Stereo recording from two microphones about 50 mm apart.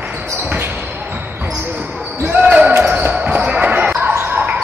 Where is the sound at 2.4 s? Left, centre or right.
Right.